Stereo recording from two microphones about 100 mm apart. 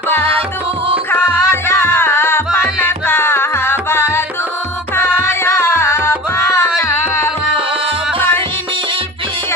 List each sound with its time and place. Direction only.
1.1 s music: 20° left (ahead or behind)